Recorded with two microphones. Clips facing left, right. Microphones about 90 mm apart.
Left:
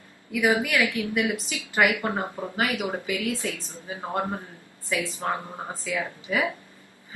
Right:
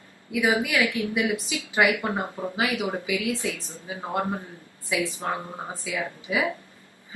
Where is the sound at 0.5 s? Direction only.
15° right (ahead or behind).